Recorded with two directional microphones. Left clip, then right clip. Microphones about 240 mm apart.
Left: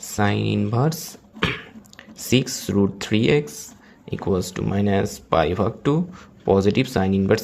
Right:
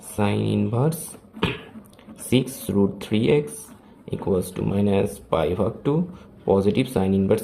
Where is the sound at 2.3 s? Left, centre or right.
Centre.